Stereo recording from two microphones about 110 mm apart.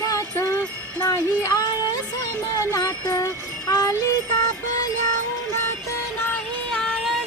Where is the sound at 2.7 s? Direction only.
30° left (ahead or behind).